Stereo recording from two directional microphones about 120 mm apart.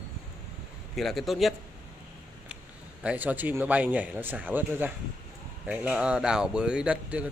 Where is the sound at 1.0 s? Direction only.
Centre (ahead or behind).